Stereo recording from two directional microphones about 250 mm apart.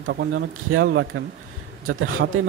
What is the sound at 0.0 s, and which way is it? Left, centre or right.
Speech, right.